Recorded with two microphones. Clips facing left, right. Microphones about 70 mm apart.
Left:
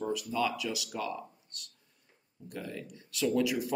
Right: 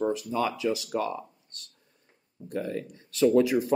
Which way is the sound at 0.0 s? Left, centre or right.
Right.